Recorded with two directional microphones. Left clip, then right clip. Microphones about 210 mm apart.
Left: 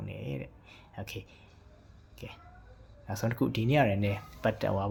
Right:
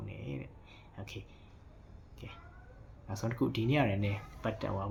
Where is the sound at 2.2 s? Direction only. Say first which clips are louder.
Left 4 dB; 30° left (ahead or behind).